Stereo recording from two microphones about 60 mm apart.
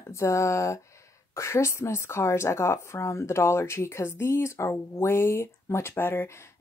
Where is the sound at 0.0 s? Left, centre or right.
Left.